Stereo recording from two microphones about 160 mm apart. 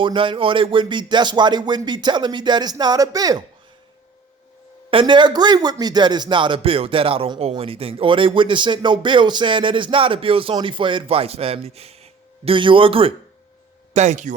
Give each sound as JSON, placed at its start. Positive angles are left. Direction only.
{"t": 0.0, "sound": "speech", "side_deg": -30}
{"t": 4.9, "sound": "speech", "side_deg": -30}
{"t": 13.9, "sound": "speech", "side_deg": -45}